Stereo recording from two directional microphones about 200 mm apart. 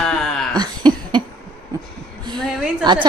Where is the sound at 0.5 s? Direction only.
20° right (ahead or behind).